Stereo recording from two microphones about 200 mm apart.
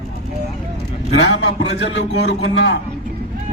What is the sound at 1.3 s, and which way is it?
A man's voice, 60° left (ahead or behind).